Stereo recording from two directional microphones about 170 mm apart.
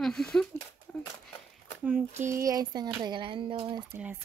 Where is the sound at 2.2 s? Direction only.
20° right (ahead or behind).